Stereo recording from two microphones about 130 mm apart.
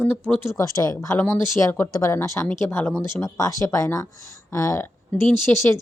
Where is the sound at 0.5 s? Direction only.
25° left (ahead or behind).